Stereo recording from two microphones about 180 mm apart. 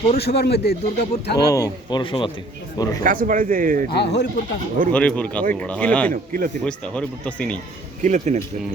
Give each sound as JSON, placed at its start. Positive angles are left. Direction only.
{"t": 0.2, "sound": "speech", "side_deg": 65}
{"t": 1.5, "sound": "speech", "side_deg": 20}
{"t": 3.0, "sound": "a man's voice", "side_deg": -50}
{"t": 3.9, "sound": "speech", "side_deg": 70}
{"t": 4.9, "sound": "speech", "side_deg": 5}
{"t": 6.1, "sound": "a man's voice", "side_deg": -55}
{"t": 6.7, "sound": "speech", "side_deg": 5}
{"t": 8.0, "sound": "speech", "side_deg": -40}